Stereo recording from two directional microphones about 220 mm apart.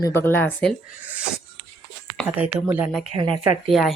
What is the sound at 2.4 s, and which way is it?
Speech, 5° right (ahead or behind).